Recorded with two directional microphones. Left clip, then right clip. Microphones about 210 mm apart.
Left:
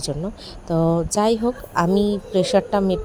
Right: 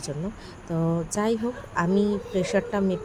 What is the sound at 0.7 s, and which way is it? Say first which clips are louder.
Speech: left 8 dB; 25° left (ahead or behind).